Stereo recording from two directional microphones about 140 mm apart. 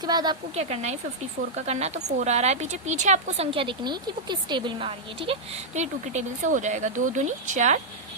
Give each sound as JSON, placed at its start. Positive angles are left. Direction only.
{"t": 0.0, "sound": "a woman's voice", "side_deg": -30}
{"t": 0.5, "sound": "speech", "side_deg": -50}